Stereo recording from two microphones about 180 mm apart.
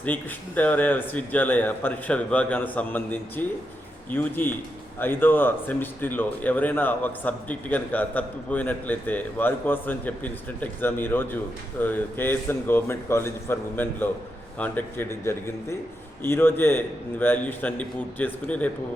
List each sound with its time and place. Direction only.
0.0 s speech: 10° left (ahead or behind)